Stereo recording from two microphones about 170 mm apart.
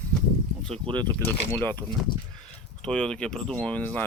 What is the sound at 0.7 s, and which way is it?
Speech, 30° right (ahead or behind).